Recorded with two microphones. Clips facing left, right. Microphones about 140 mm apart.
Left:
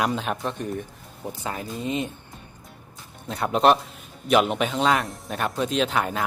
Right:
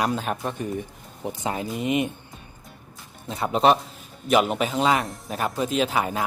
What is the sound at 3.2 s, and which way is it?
Speech, centre (ahead or behind).